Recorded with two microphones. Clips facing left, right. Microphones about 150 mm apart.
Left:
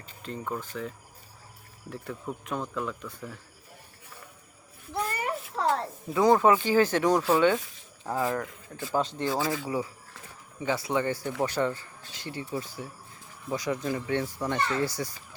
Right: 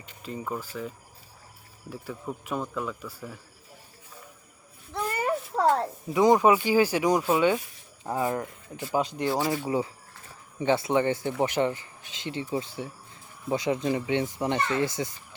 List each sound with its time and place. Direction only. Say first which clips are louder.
0.2 s speech: right 1 dB; 5° right (ahead or behind)
5.2 s a sound: right 8 dB; 30° right (ahead or behind)
6.1 s speech: right 1 dB; 15° right (ahead or behind)